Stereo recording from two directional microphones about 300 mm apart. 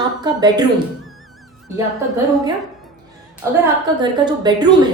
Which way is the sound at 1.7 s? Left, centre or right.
Centre.